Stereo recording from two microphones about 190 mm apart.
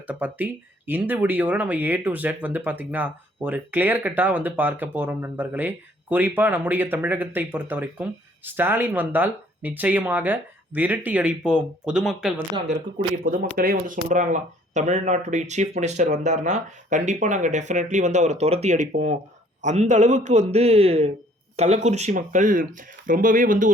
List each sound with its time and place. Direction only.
0.1 s speech: 10° right (ahead or behind)
13.6 s speech: 45° right (ahead or behind)